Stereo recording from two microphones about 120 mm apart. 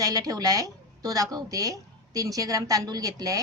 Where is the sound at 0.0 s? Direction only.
30° right (ahead or behind).